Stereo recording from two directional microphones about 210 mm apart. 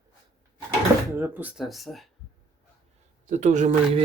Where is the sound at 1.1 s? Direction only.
10° right (ahead or behind).